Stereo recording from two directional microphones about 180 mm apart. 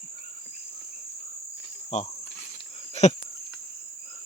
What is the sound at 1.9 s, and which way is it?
Speech, 40° left (ahead or behind).